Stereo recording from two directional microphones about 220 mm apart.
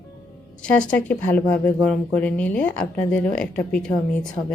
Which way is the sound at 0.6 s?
5° left (ahead or behind).